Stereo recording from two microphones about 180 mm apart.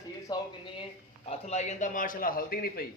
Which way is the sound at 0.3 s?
30° left (ahead or behind).